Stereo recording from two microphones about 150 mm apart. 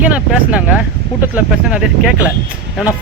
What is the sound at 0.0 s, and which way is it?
Speech, 10° right (ahead or behind).